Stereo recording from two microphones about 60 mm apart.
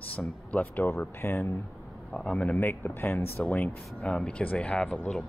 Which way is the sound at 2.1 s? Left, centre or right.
Centre.